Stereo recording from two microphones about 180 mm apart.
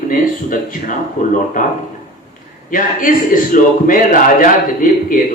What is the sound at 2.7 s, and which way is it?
Speech, 50° left (ahead or behind).